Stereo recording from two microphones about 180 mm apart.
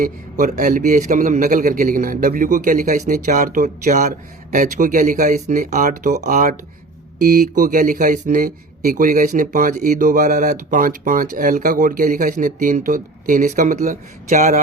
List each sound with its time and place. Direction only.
0.0 s speech: 50° right (ahead or behind)